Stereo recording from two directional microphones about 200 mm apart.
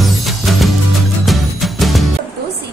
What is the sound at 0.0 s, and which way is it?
Music, centre (ahead or behind).